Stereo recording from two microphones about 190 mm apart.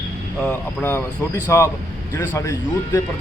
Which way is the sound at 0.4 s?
10° left (ahead or behind).